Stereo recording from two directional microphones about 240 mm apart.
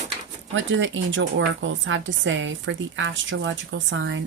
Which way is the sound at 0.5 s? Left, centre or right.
Right.